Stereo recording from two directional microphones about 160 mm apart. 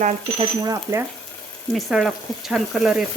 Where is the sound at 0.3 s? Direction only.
20° right (ahead or behind).